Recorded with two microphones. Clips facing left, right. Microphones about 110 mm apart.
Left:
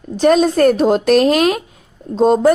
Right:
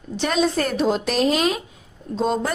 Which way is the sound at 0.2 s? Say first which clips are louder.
Left 9 dB; 45° left (ahead or behind).